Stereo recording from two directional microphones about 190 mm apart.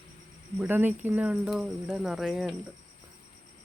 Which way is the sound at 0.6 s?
10° right (ahead or behind).